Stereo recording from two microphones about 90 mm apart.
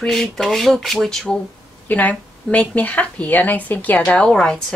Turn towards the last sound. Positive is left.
turn(degrees=10)  # may be behind; listen again after turning